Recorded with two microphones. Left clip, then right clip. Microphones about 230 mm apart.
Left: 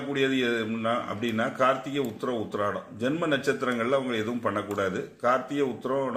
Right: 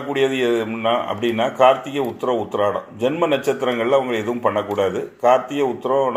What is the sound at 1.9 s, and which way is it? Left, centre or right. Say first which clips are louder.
Speech: right 9 dB; right.